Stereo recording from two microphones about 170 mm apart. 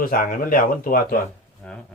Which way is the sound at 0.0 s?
55° left (ahead or behind).